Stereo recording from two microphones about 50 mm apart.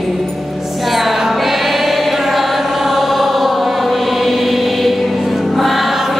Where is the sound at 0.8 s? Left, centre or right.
Centre.